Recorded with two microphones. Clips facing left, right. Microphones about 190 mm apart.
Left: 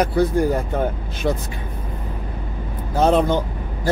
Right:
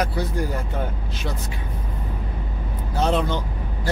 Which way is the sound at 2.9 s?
50° left (ahead or behind).